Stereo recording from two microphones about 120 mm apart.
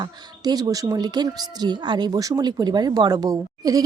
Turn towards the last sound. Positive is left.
turn(degrees=-30)  # may be behind; listen again after turning